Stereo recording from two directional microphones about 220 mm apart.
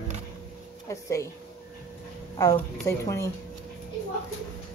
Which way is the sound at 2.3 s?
15° left (ahead or behind).